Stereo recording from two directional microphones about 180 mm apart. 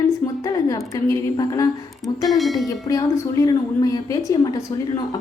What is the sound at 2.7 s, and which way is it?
A woman's voice, 20° left (ahead or behind).